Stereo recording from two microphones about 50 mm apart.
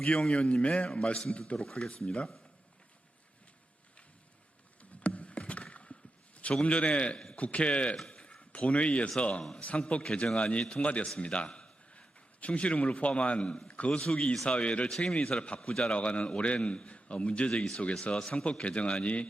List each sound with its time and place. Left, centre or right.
0.0 s a man's voice: centre
1.5 s a man's voice: centre
4.8 s rowboat: left
8.0 s a sound: left
9.6 s a man's voice: left